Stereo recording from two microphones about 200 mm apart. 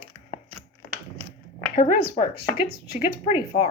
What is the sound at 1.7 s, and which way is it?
Speech, 40° left (ahead or behind).